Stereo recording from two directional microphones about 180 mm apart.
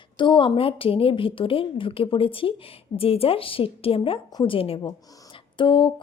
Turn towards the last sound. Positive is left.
turn(degrees=25)  # may be behind; listen again after turning